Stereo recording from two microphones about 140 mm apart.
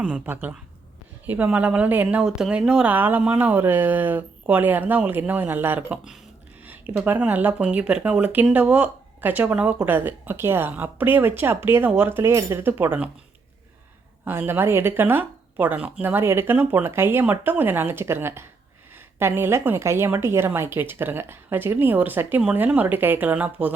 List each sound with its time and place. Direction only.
0.0 s speech: 10° right (ahead or behind)
14.3 s speech: 15° right (ahead or behind)